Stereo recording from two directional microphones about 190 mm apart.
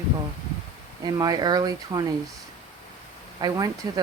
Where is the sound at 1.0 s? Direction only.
20° right (ahead or behind).